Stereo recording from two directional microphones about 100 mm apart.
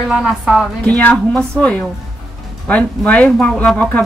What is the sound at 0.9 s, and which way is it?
Speech, 15° left (ahead or behind).